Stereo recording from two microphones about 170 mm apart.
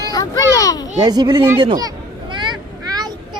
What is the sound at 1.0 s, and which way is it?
Speech, 25° right (ahead or behind).